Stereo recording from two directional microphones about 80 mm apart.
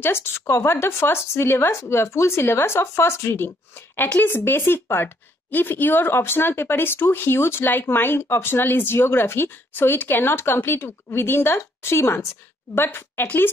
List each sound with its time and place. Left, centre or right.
0.0 s speech: left